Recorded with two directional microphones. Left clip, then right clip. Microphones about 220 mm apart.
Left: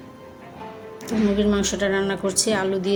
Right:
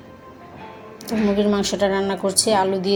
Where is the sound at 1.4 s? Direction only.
Centre (ahead or behind).